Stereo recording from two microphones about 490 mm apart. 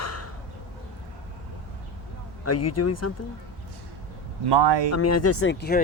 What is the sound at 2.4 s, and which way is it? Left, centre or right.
Speech, left.